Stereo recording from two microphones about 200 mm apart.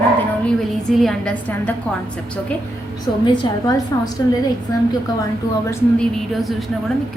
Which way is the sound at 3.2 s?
20° left (ahead or behind).